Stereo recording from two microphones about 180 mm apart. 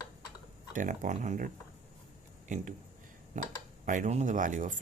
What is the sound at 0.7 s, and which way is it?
Speech, 45° right (ahead or behind).